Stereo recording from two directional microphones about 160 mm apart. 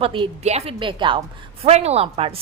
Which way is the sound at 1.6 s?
40° right (ahead or behind).